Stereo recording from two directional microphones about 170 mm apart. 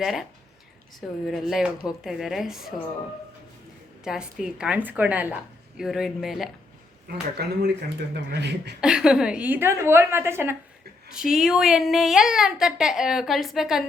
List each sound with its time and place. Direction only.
0.0 s a woman's voice: centre (ahead or behind)
1.3 s a woman's voice: centre (ahead or behind)
4.0 s a woman's voice: 5° right (ahead or behind)
7.1 s speech: 70° right (ahead or behind)
8.8 s a woman's voice: 5° right (ahead or behind)
11.1 s a woman's voice: 5° right (ahead or behind)